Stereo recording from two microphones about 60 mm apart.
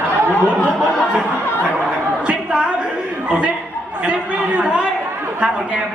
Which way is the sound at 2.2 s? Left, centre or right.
Centre.